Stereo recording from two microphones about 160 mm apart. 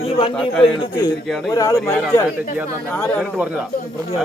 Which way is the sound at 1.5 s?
20° left (ahead or behind).